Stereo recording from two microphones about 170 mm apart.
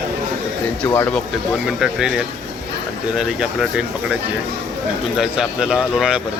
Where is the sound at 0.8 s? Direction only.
15° left (ahead or behind).